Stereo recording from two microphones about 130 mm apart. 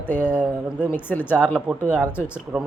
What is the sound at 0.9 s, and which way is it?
Speech, 15° left (ahead or behind).